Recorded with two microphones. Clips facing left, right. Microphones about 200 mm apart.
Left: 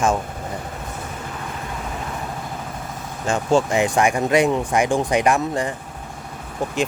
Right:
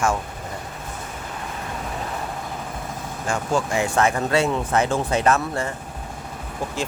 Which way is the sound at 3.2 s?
25° left (ahead or behind).